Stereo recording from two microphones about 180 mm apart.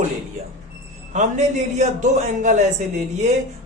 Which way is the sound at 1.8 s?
40° right (ahead or behind).